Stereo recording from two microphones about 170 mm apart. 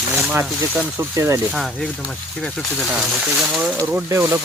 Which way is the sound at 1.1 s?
15° right (ahead or behind).